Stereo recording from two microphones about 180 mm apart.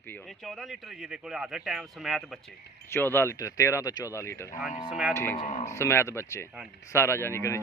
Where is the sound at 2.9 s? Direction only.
10° left (ahead or behind).